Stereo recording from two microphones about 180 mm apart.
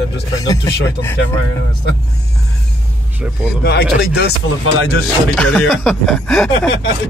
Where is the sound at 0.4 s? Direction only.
20° left (ahead or behind).